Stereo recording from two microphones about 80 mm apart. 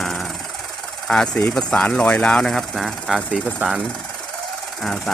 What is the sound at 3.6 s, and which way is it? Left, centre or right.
Speech, right.